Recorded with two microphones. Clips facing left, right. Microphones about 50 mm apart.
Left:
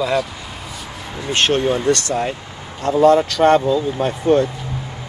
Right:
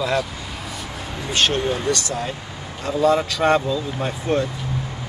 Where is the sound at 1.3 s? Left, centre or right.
Left.